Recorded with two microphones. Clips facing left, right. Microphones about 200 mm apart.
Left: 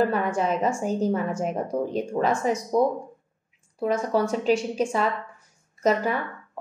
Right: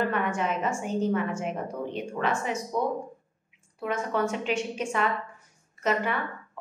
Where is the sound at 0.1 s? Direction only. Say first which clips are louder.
Left 4 dB; 35° left (ahead or behind).